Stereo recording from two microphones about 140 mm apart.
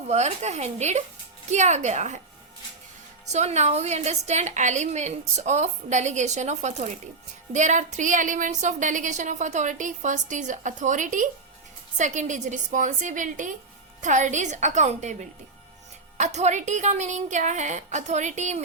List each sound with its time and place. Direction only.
0.1 s a woman's voice: 50° right (ahead or behind)
3.2 s a woman's voice: 55° right (ahead or behind)